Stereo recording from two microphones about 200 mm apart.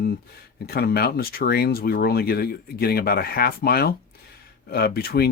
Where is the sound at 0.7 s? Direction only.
50° left (ahead or behind).